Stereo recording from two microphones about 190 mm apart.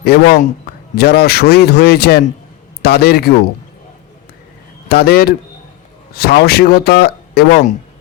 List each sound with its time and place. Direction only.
0.0 s speech: 55° left (ahead or behind)
4.9 s speech: 55° left (ahead or behind)